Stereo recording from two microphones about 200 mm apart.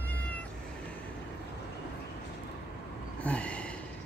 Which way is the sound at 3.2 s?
5° left (ahead or behind).